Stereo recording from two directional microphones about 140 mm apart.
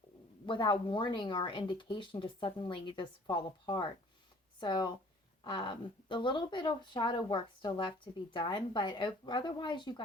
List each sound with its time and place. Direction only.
0.4 s speech: 35° left (ahead or behind)